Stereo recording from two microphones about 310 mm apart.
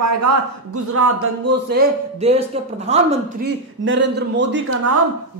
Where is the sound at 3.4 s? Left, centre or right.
Right.